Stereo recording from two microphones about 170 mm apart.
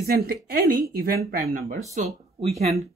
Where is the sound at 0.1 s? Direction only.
65° right (ahead or behind).